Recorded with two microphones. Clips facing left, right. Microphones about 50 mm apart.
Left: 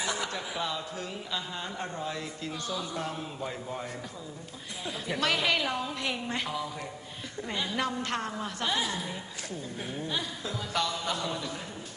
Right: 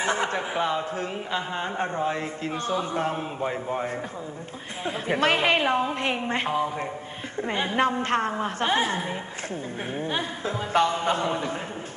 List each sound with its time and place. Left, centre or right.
0.0 s a man's voice: right